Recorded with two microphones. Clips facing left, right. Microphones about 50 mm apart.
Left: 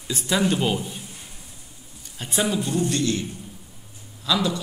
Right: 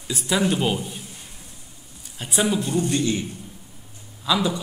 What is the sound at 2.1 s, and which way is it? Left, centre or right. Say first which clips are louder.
A man's voice: right 1 dB; centre.